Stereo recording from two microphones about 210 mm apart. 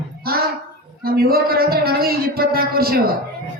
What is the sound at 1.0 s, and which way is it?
Speech, 45° right (ahead or behind).